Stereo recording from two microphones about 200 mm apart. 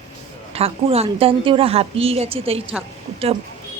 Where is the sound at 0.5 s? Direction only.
30° right (ahead or behind).